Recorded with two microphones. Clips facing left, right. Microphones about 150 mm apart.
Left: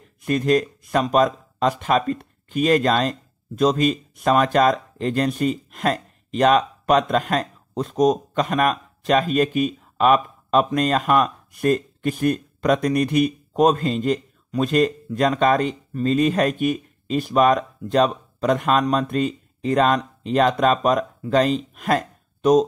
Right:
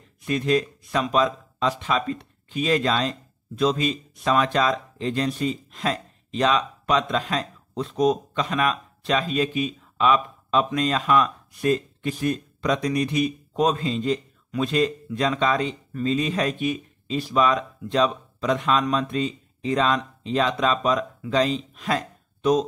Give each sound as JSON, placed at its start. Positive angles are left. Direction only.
{"t": 0.2, "sound": "speech", "side_deg": 50}